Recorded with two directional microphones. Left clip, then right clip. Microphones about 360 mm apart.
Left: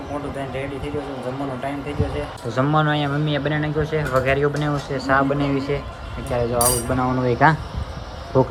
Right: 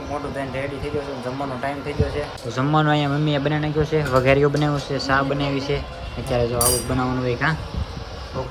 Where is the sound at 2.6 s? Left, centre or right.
Centre.